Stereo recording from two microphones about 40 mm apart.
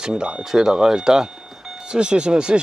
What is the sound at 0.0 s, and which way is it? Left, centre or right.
Speech, centre.